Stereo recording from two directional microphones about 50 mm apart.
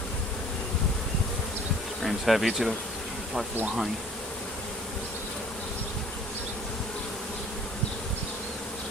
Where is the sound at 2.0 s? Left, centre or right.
Centre.